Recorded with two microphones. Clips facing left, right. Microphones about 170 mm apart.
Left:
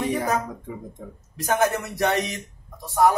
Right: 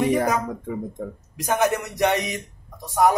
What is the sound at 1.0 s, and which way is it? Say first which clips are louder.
Speech: right 8 dB; 60° right (ahead or behind).